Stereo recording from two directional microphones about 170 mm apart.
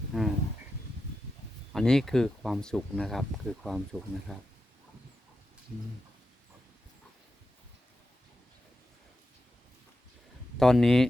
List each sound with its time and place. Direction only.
0.1 s a sound: centre (ahead or behind)
1.7 s speech: 5° left (ahead or behind)
10.6 s speech: centre (ahead or behind)